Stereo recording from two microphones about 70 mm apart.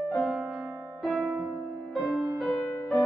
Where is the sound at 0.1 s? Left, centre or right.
Centre.